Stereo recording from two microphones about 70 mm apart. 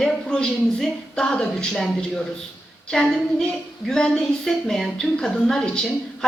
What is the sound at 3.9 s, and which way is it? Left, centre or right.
Speech, centre.